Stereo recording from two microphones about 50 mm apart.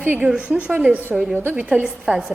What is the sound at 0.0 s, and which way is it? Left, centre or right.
Speech, right.